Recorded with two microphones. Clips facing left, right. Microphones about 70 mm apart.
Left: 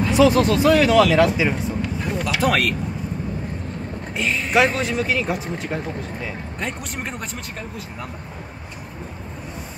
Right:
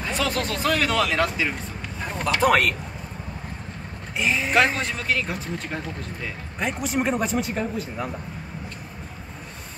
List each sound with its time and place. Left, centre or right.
0.0 s speech: centre
4.2 s speech: centre